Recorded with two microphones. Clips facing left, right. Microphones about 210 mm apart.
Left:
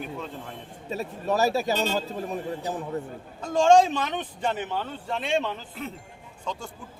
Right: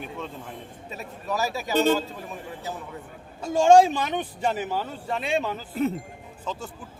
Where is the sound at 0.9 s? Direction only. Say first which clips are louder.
Left 5 dB; 35° left (ahead or behind).